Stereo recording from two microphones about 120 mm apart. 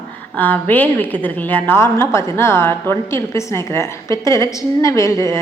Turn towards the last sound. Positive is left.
turn(degrees=25)  # may be behind; listen again after turning